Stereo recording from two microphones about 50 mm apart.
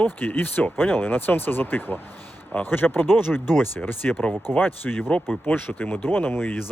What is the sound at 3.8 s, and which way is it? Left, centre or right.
Speech, left.